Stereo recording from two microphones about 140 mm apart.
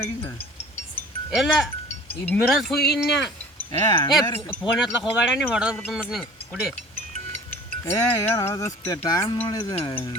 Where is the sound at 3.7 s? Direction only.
35° left (ahead or behind).